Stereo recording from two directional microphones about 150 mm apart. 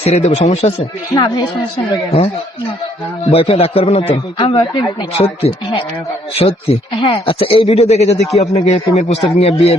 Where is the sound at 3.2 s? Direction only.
40° left (ahead or behind).